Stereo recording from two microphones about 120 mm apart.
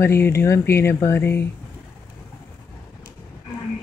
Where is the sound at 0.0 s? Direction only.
20° left (ahead or behind).